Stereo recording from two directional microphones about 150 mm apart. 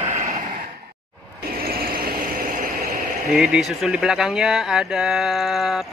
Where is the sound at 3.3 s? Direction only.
5° right (ahead or behind).